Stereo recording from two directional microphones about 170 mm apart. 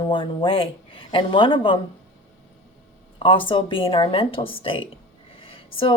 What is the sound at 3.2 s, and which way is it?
A woman's voice, 30° left (ahead or behind).